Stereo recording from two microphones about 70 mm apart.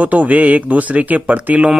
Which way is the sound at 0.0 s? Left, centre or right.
Right.